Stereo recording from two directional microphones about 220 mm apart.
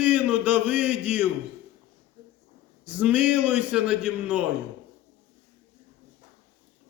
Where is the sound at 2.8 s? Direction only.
5° right (ahead or behind).